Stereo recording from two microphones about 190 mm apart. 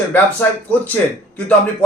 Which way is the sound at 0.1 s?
10° left (ahead or behind).